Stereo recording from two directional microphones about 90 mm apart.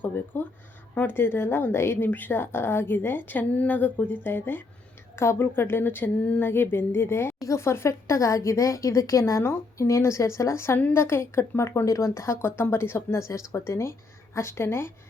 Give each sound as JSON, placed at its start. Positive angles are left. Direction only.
{"t": 0.0, "sound": "a woman's voice", "side_deg": 20}